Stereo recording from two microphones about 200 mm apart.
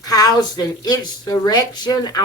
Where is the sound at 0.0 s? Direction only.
20° left (ahead or behind).